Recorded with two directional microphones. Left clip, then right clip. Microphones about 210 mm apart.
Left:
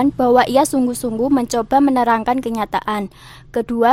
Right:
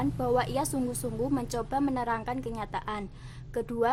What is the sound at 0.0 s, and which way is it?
A woman's voice, 40° left (ahead or behind).